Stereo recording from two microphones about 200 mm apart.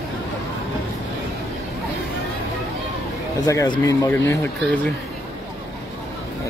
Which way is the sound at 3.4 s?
20° left (ahead or behind).